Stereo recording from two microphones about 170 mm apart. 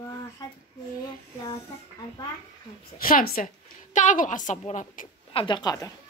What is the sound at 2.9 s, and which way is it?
A woman's voice, 60° left (ahead or behind).